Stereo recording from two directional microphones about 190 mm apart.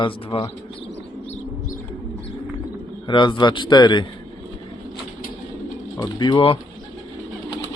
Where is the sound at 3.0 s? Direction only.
25° left (ahead or behind).